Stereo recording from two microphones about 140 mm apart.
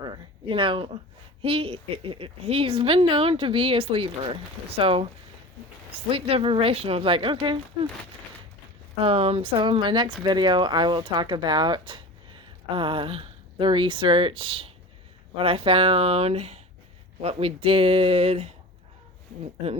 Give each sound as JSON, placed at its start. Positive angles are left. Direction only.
{"t": 0.0, "sound": "a sound", "side_deg": -35}
{"t": 1.4, "sound": "speech", "side_deg": -45}
{"t": 9.0, "sound": "speech", "side_deg": -40}